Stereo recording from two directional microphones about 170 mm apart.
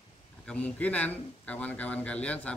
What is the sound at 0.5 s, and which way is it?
A man's voice, 10° left (ahead or behind).